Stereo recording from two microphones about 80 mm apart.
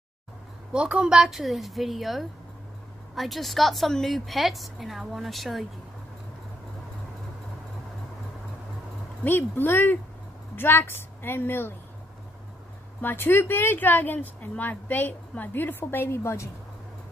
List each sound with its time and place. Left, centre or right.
0.7 s a woman's voice: centre
9.2 s a woman's voice: left
13.0 s a woman's voice: left